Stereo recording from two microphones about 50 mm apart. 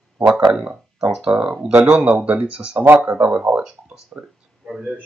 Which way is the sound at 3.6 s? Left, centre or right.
Centre.